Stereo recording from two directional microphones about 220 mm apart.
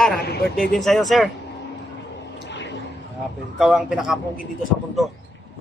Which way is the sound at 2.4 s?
55° left (ahead or behind).